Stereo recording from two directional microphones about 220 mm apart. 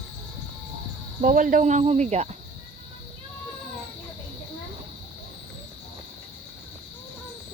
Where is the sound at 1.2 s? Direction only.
35° right (ahead or behind).